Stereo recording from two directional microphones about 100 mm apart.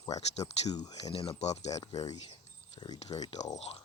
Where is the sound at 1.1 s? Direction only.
65° left (ahead or behind); by 1.8 s 90° left.